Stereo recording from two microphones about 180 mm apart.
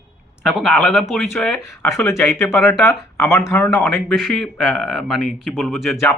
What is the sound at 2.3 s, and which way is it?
A man's voice, 15° left (ahead or behind).